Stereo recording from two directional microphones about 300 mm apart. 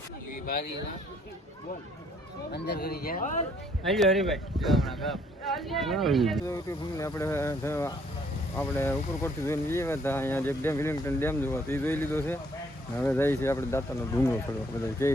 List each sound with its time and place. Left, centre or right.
2.5 s speech: left
3.8 s speech: centre
6.4 s speech: centre